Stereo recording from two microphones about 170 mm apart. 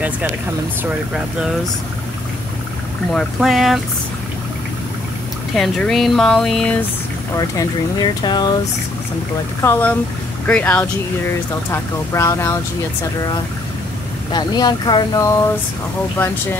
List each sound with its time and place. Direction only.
0.8 s speech: 5° right (ahead or behind)
3.1 s speech: centre (ahead or behind)
5.5 s speech: centre (ahead or behind)
7.3 s speech: 25° left (ahead or behind)
9.6 s speech: 10° left (ahead or behind)
14.3 s speech: 25° left (ahead or behind)